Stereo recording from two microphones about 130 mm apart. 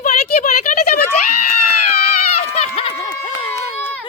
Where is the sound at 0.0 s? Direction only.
65° left (ahead or behind); by 0.8 s 85° left.